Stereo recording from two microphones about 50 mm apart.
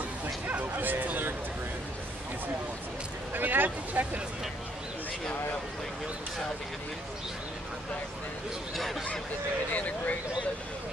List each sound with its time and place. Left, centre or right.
0.5 s speech: right
3.3 s speech: right
9.7 s speech: left